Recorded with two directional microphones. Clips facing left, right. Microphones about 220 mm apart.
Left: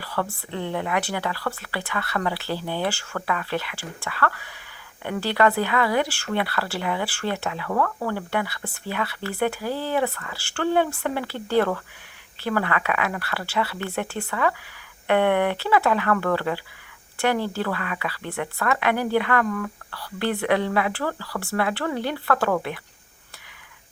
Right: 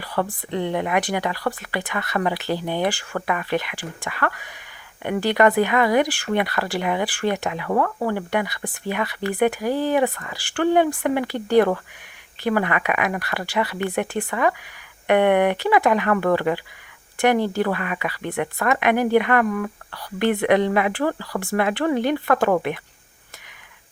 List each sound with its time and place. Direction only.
0.0 s speech: 15° right (ahead or behind)